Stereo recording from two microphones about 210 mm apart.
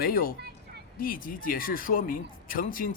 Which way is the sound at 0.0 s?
45° left (ahead or behind).